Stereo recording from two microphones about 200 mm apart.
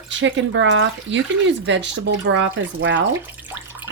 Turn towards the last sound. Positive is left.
turn(degrees=-10)  # may be behind; listen again after turning